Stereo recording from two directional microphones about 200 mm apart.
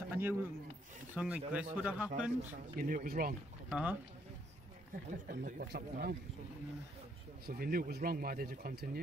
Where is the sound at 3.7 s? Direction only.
10° right (ahead or behind).